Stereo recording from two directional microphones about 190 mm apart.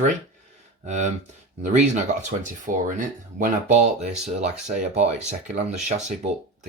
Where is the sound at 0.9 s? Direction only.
35° right (ahead or behind).